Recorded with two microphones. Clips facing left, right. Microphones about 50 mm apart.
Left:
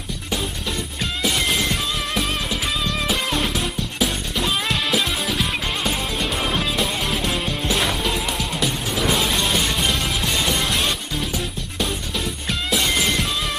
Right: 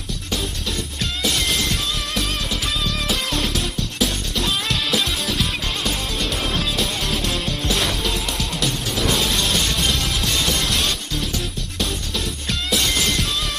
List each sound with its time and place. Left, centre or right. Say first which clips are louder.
1.2 s music: left 1 dB; centre